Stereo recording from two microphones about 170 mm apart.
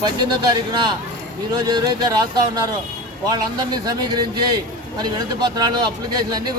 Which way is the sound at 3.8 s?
25° right (ahead or behind).